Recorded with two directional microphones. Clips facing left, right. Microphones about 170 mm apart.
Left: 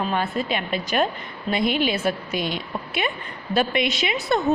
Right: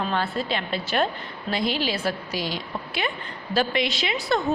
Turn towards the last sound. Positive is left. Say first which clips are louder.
# left 2 dB
turn(degrees=20)  # may be behind; listen again after turning